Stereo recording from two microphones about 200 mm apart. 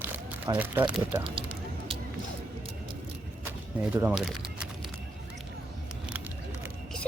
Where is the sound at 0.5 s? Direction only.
10° right (ahead or behind).